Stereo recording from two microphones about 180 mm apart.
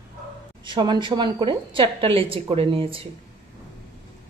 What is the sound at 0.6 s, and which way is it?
A woman's voice, 25° right (ahead or behind).